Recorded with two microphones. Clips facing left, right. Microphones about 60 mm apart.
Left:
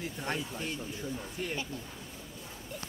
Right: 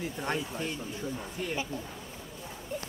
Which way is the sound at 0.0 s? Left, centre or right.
Centre.